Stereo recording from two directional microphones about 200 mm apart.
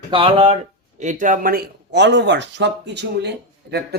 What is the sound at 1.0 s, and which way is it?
Speech, 40° right (ahead or behind).